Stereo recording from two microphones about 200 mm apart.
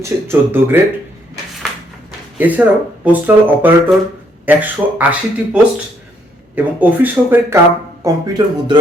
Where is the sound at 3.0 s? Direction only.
10° right (ahead or behind).